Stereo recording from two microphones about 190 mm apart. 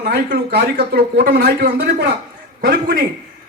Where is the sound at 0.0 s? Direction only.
60° right (ahead or behind).